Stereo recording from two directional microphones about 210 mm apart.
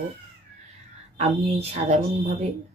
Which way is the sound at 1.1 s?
30° right (ahead or behind).